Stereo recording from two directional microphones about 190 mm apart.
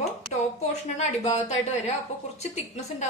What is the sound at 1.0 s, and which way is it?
Speech, 35° left (ahead or behind).